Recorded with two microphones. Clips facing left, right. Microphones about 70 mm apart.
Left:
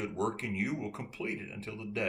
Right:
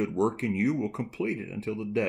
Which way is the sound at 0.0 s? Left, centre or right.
Right.